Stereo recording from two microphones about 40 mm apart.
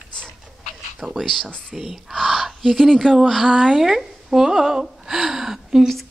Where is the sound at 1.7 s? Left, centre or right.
Centre.